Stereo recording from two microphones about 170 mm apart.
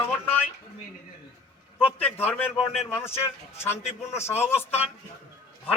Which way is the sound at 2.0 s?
10° left (ahead or behind).